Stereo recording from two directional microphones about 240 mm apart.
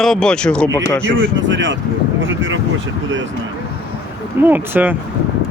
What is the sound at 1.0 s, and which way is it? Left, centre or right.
Speech, right.